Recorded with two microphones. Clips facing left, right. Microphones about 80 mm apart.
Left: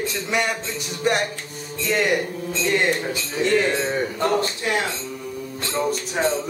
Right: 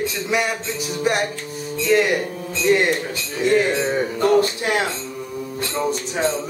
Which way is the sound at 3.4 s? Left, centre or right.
Centre.